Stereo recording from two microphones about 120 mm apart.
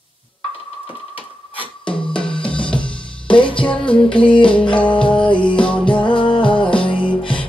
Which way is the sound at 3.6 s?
10° left (ahead or behind).